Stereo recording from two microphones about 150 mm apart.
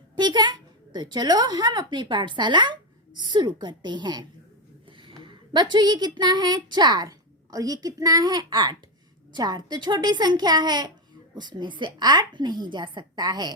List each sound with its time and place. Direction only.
0.2 s a woman's voice: 30° right (ahead or behind)